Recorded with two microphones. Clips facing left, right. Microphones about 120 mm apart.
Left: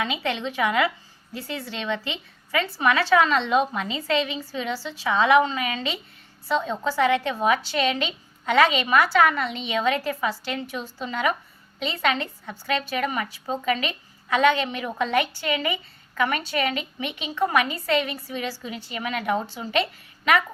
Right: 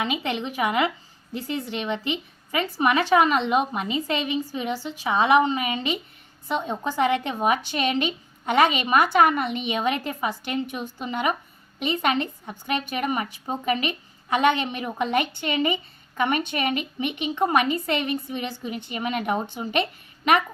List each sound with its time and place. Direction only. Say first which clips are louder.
0.0 s a woman's voice: even; 15° right (ahead or behind)